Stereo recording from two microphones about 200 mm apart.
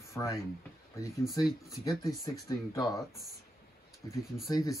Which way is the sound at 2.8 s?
Centre (ahead or behind).